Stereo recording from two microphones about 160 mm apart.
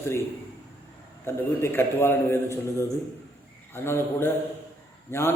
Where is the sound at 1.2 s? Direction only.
15° left (ahead or behind).